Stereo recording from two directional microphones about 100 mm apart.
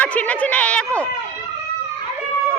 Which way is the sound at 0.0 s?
15° left (ahead or behind).